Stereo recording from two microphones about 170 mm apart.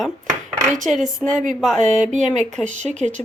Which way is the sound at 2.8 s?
45° right (ahead or behind).